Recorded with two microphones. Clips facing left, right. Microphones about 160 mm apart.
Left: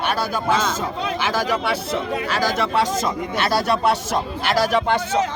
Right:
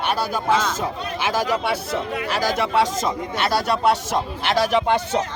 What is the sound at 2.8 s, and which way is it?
Speech, centre (ahead or behind).